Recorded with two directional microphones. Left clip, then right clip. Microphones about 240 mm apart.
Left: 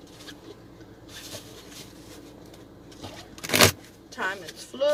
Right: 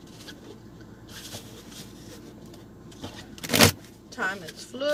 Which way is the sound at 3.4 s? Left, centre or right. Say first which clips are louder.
Left 1 dB; centre.